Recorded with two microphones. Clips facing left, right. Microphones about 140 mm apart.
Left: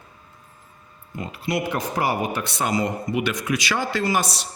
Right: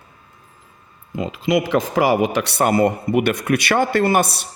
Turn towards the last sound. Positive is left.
turn(degrees=-55)  # may be behind; listen again after turning